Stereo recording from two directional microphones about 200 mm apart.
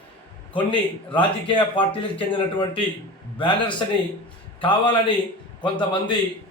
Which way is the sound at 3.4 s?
25° left (ahead or behind).